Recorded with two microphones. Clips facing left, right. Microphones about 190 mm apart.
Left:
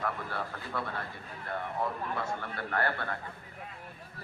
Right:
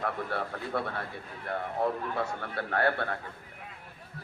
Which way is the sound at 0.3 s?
60° right (ahead or behind).